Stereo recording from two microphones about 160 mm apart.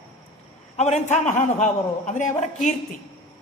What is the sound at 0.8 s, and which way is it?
A man's voice, 45° left (ahead or behind).